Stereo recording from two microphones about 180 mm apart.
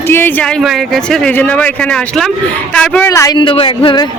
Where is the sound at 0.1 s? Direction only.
10° left (ahead or behind); by 4.0 s 30° left (ahead or behind).